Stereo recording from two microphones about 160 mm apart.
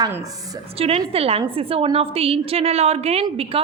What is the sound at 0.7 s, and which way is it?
A woman's voice, 40° right (ahead or behind).